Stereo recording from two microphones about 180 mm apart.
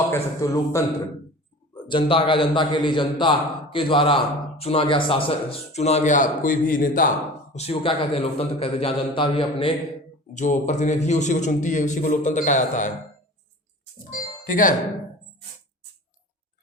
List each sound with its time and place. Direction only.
0.1 s a man's voice: 15° left (ahead or behind)
1.7 s a man's voice: 30° left (ahead or behind); by 7.1 s 50° left (ahead or behind)
7.5 s a man's voice: 35° left (ahead or behind)
10.3 s a man's voice: 45° left (ahead or behind)
14.4 s a man's voice: 50° left (ahead or behind)